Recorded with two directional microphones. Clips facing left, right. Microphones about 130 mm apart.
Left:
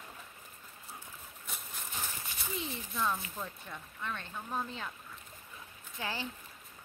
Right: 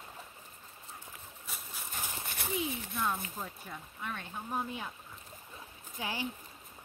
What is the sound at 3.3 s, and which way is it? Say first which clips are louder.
Speech: even; 10° right (ahead or behind).